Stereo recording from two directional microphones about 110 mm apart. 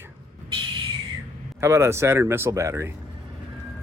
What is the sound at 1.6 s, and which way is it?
Speech, 25° right (ahead or behind).